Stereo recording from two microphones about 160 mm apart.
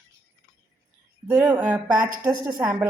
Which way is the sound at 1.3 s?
15° right (ahead or behind).